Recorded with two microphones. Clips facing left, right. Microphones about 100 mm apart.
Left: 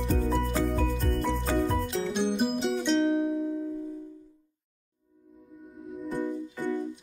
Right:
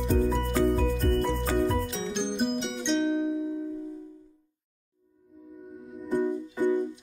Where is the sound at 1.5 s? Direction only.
Centre (ahead or behind).